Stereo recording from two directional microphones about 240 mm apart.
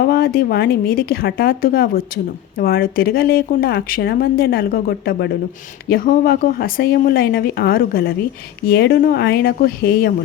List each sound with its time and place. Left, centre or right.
0.0 s speech: left